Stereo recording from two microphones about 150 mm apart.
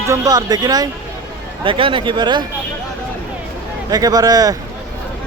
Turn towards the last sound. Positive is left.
turn(degrees=-25)  # may be behind; listen again after turning